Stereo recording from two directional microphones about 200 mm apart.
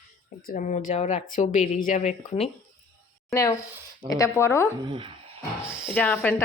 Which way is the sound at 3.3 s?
15° left (ahead or behind).